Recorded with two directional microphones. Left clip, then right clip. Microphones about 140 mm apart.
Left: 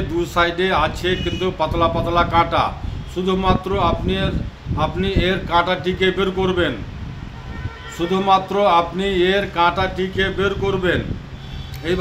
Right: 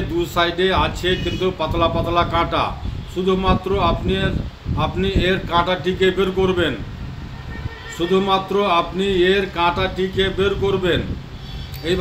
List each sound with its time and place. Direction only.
0.2 s speech: 35° left (ahead or behind)
8.1 s speech: 35° left (ahead or behind)